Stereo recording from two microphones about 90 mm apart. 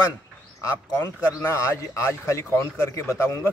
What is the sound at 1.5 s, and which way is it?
A man's voice, 35° left (ahead or behind).